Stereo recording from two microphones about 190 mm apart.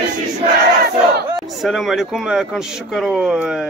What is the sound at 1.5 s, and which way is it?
Speech, centre (ahead or behind).